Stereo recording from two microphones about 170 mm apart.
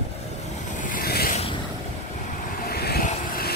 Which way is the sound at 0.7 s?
55° left (ahead or behind).